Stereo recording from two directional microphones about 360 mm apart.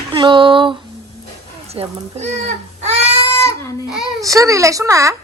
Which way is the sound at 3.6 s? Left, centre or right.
Centre.